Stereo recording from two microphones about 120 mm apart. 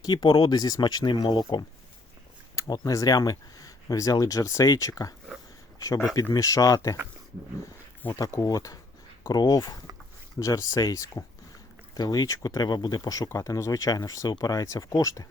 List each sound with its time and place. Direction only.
0.0 s speech: 35° left (ahead or behind)
6.3 s speech: 30° left (ahead or behind)
8.2 s speech: 30° left (ahead or behind)